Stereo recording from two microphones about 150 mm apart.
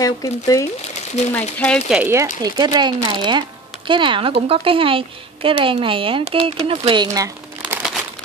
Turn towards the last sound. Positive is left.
turn(degrees=-20)  # may be behind; listen again after turning